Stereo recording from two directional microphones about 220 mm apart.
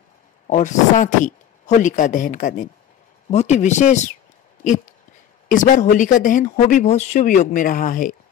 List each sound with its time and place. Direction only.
0.5 s speech: 35° left (ahead or behind)
5.5 s speech: 35° left (ahead or behind)